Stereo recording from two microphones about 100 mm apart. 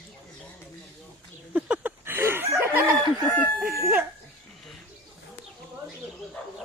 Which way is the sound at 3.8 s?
20° right (ahead or behind).